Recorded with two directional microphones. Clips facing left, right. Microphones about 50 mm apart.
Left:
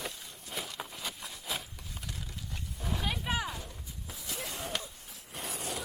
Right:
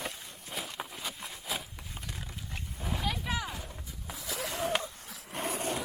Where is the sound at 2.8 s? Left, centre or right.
Centre.